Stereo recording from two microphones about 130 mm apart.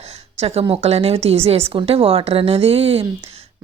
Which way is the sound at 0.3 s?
50° right (ahead or behind).